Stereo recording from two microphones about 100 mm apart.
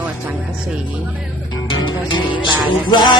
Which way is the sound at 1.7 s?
55° left (ahead or behind).